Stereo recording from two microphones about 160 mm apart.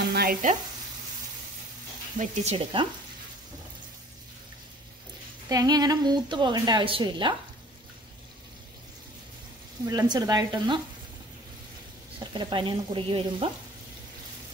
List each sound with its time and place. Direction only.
0.0 s frying: 70° right (ahead or behind)
2.2 s speech: 55° right (ahead or behind)
2.5 s speech: 30° right (ahead or behind)
5.5 s a woman's voice: 25° right (ahead or behind)
9.8 s a woman's voice: 25° right (ahead or behind)
12.2 s speech: 30° right (ahead or behind)